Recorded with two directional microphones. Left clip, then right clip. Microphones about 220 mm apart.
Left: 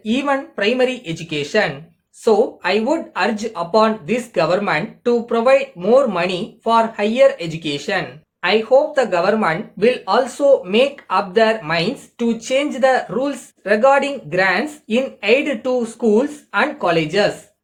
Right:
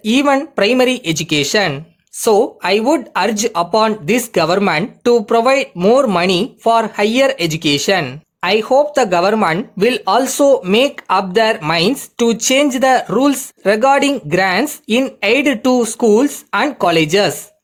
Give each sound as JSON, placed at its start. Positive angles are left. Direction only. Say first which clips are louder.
{"t": 0.0, "sound": "speech", "louder": "right 6 dB", "side_deg": -50}